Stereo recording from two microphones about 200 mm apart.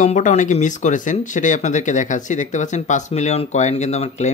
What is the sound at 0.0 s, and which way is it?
Speech, 35° left (ahead or behind).